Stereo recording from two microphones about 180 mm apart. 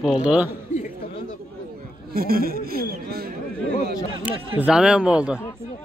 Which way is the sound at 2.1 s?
55° right (ahead or behind).